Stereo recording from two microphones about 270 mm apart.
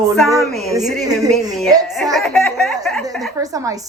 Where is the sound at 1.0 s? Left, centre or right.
Centre.